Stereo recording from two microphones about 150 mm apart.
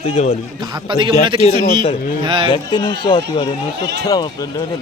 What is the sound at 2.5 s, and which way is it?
Speech, 30° left (ahead or behind).